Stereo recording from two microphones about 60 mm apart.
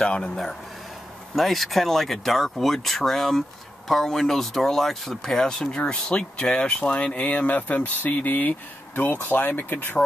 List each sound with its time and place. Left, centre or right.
0.0 s speech: centre
1.3 s speech: centre; by 9.9 s left